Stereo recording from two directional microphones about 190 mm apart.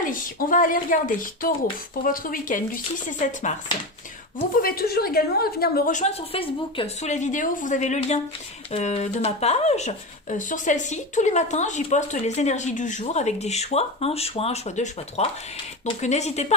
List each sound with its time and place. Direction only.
0.0 s speech: 45° left (ahead or behind)
4.6 s speech: 50° left (ahead or behind); by 16.5 s 35° left (ahead or behind)